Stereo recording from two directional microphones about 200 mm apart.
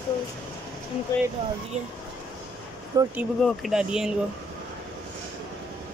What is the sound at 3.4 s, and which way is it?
Speech, centre (ahead or behind).